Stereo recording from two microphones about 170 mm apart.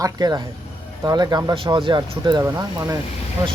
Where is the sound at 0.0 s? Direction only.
25° right (ahead or behind).